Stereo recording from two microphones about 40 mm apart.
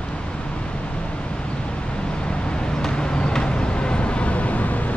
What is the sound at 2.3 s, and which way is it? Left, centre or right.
Vehicle, left.